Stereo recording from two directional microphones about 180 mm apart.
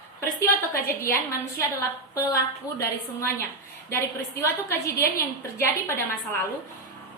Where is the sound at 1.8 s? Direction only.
20° left (ahead or behind).